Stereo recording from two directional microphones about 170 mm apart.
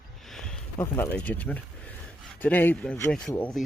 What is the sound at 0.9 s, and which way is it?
Speech, 10° left (ahead or behind).